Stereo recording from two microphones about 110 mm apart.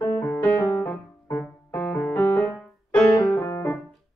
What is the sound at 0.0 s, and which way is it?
Music, 20° left (ahead or behind).